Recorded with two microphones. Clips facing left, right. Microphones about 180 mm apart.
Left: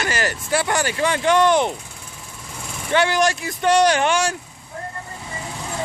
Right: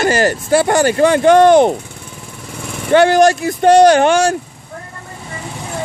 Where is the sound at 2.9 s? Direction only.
50° right (ahead or behind).